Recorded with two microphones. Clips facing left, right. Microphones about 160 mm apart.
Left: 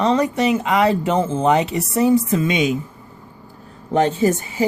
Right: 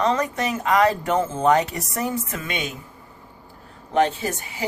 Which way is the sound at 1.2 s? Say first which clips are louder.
Left 3 dB; 25° left (ahead or behind).